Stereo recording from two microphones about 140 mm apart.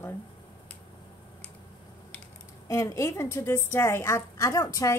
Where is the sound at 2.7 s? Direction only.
20° left (ahead or behind).